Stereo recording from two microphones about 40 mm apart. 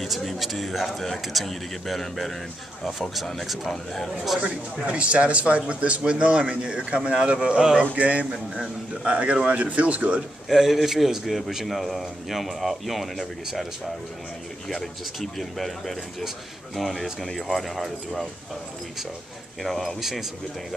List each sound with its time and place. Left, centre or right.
0.0 s a man's voice: centre
3.6 s a man's voice: centre
4.8 s speech: right
10.5 s speech: centre
15.3 s speech: centre
19.6 s speech: centre
20.0 s speech: centre